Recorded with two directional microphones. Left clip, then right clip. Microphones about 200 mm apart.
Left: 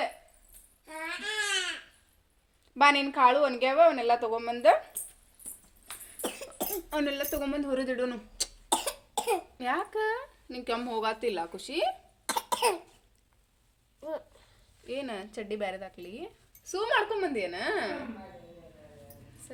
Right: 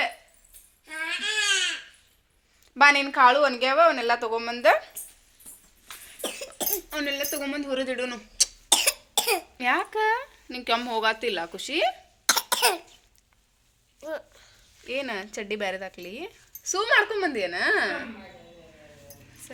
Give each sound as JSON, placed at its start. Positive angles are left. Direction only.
{"t": 0.9, "sound": "a sound", "side_deg": 30}
{"t": 2.7, "sound": "speech", "side_deg": 5}
{"t": 6.2, "sound": "cough", "side_deg": 35}
{"t": 7.3, "sound": "speech", "side_deg": 20}
{"t": 8.7, "sound": "cough", "side_deg": 25}
{"t": 9.6, "sound": "speech", "side_deg": -10}
{"t": 12.3, "sound": "cough", "side_deg": 10}
{"t": 14.8, "sound": "speech", "side_deg": -10}